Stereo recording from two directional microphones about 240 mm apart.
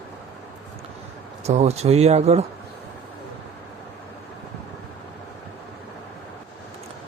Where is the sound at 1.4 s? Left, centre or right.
Right.